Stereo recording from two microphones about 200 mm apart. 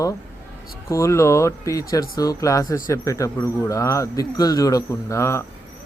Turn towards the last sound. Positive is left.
turn(degrees=15)  # may be behind; listen again after turning